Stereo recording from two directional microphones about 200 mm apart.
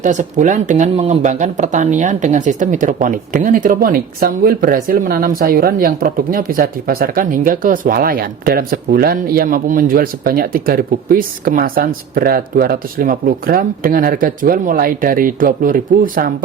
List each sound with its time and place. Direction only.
0.0 s speech: 40° right (ahead or behind)